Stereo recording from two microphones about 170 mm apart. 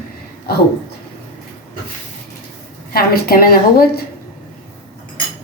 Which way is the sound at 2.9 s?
65° left (ahead or behind).